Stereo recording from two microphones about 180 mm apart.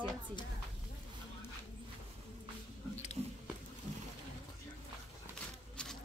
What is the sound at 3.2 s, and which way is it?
Biting, 15° right (ahead or behind).